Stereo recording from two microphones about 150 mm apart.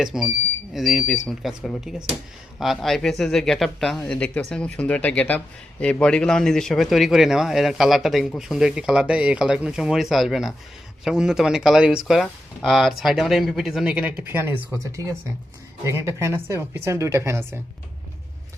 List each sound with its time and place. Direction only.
0.0 s a woman's voice: 5° right (ahead or behind)